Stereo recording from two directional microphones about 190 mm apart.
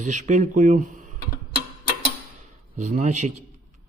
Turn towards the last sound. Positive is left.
turn(degrees=-40)  # may be behind; listen again after turning